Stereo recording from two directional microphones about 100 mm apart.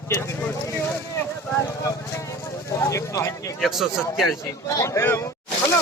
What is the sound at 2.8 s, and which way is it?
Speech, 30° left (ahead or behind).